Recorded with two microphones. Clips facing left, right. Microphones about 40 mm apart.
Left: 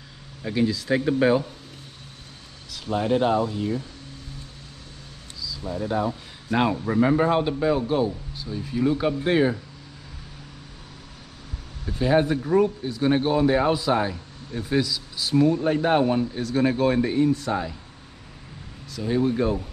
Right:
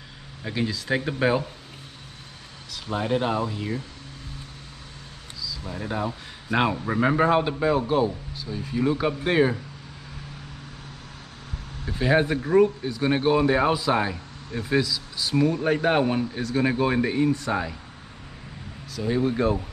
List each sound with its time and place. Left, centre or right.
0.4 s speech: centre
2.7 s speech: centre
5.4 s a sound: centre
5.7 s speech: centre
11.9 s speech: centre
12.6 s speech: centre
15.4 s speech: centre
18.9 s speech: centre